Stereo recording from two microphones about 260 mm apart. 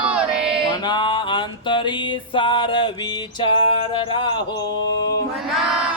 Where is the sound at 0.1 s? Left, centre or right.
Centre.